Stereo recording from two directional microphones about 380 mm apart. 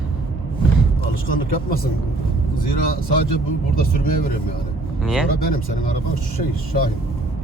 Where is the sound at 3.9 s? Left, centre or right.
Left.